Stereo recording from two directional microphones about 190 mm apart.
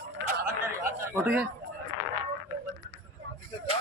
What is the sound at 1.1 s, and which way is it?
Speech, 10° right (ahead or behind).